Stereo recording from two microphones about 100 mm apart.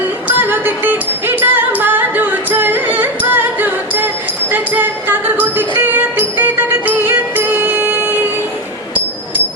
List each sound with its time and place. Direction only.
0.3 s music: 20° right (ahead or behind)